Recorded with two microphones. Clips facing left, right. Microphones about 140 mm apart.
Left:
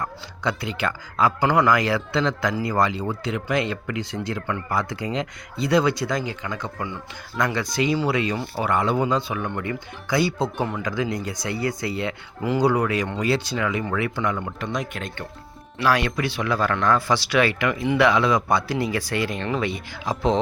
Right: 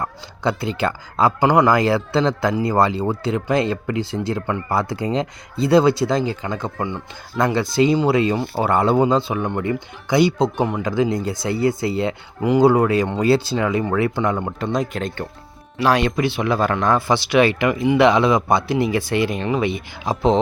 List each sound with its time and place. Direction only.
0.0 s speech: 30° right (ahead or behind)
1.4 s speech: 20° right (ahead or behind)
12.4 s speech: 20° right (ahead or behind); by 15.3 s 35° right (ahead or behind)
15.8 s speech: 25° right (ahead or behind)